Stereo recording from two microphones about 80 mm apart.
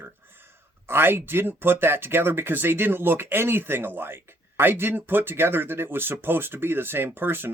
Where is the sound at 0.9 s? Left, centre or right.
Right.